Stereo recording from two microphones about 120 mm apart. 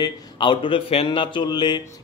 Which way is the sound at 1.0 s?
40° left (ahead or behind).